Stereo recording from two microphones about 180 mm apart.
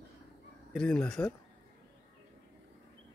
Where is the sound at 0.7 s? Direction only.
5° left (ahead or behind).